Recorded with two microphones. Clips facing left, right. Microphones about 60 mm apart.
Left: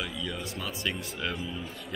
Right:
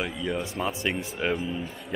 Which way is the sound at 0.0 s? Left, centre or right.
Right.